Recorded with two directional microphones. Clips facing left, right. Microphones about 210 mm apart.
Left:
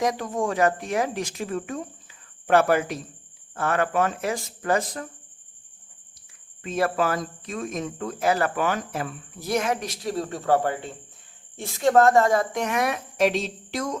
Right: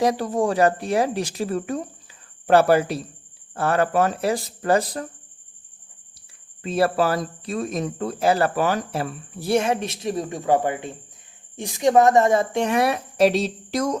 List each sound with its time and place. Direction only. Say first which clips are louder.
0.0 s speech: right 4 dB; 35° right (ahead or behind)
6.6 s speech: right 4 dB; 35° right (ahead or behind)